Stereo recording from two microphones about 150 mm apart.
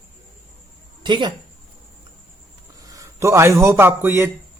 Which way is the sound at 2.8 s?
20° right (ahead or behind).